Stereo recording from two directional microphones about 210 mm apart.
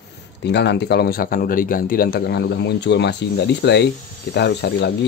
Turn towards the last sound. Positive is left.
turn(degrees=55)  # may be behind; listen again after turning